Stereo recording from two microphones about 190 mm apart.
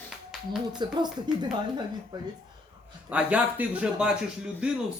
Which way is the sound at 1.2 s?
20° right (ahead or behind).